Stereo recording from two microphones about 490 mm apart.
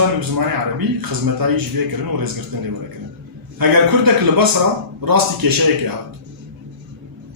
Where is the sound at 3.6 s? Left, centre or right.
Right.